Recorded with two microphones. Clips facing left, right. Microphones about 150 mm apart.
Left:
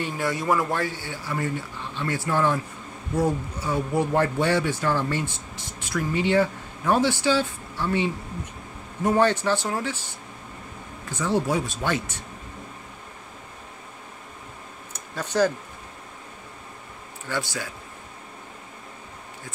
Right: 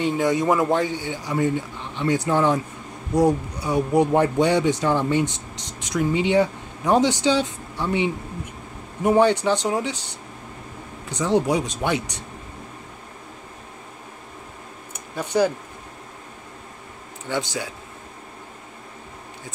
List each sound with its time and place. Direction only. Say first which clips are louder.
0.0 s a man's voice: right 6 dB; 20° right (ahead or behind)
14.9 s a sound: right 3 dB; 10° right (ahead or behind)
17.3 s a man's voice: right 3 dB; 20° right (ahead or behind)